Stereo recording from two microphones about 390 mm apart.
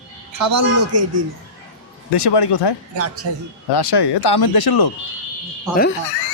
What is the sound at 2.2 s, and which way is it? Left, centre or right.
Speech, left.